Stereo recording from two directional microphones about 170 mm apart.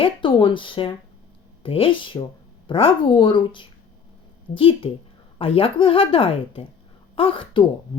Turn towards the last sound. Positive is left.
turn(degrees=30)  # may be behind; listen again after turning